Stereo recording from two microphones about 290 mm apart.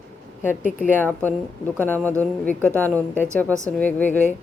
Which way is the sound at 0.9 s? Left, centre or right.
Centre.